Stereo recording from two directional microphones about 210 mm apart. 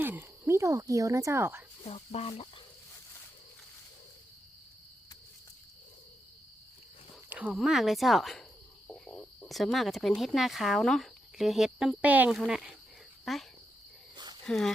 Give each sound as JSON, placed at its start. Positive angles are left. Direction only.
{"t": 0.0, "sound": "speech", "side_deg": -10}
{"t": 1.8, "sound": "speech", "side_deg": 30}
{"t": 7.3, "sound": "speech", "side_deg": -5}
{"t": 14.4, "sound": "speech", "side_deg": 0}